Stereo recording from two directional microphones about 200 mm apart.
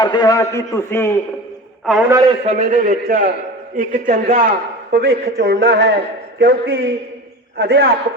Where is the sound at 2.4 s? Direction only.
35° right (ahead or behind).